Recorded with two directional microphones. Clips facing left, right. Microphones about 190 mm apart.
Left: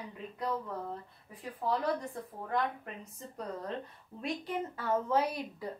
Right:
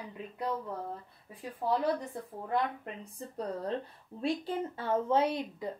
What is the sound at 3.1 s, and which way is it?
Speech, 30° right (ahead or behind).